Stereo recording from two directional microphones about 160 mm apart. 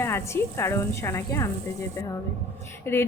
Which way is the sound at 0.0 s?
15° left (ahead or behind).